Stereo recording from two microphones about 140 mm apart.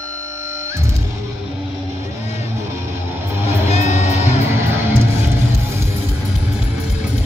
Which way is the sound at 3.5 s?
50° left (ahead or behind).